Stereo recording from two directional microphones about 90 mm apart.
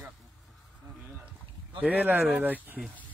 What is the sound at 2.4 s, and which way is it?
Speech, 10° right (ahead or behind).